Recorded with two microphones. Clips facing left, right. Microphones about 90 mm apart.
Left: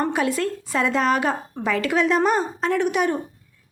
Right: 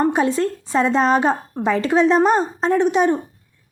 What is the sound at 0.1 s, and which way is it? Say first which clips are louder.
Speech: right 4 dB; 30° right (ahead or behind).